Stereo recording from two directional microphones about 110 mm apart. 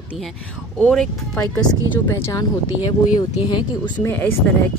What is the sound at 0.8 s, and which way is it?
Speech, 10° left (ahead or behind).